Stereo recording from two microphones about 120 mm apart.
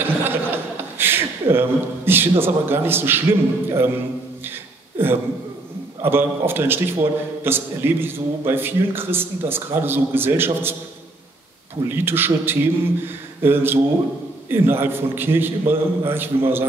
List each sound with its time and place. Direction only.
0.0 s chuckle: 15° right (ahead or behind)
1.5 s a man's voice: 20° right (ahead or behind)
4.9 s a man's voice: 20° right (ahead or behind)
11.9 s a man's voice: 20° right (ahead or behind)